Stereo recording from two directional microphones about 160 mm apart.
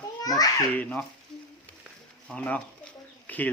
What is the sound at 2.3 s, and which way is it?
Speech, 10° left (ahead or behind).